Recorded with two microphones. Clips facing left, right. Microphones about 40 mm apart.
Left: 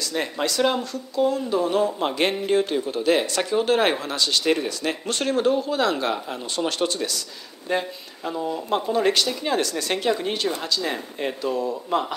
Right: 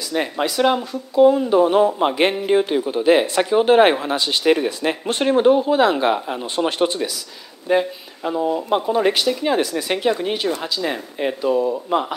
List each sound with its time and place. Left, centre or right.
0.1 s speech: centre